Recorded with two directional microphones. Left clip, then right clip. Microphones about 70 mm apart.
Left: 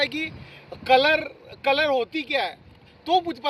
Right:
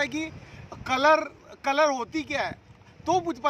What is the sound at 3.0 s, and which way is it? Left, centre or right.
Speech, right.